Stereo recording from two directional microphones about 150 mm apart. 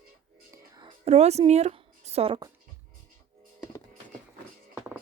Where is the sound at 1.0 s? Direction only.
45° right (ahead or behind).